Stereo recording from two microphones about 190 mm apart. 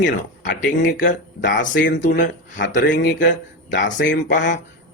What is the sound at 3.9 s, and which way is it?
Speech, 70° left (ahead or behind).